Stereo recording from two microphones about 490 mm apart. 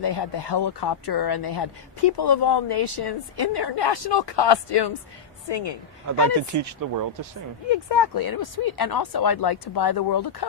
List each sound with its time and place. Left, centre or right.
0.0 s a woman's voice: left
6.1 s speech: right
7.7 s speech: left
8.1 s a woman's voice: left